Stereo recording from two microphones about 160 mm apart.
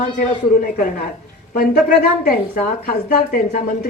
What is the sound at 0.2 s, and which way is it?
Speech, 60° left (ahead or behind).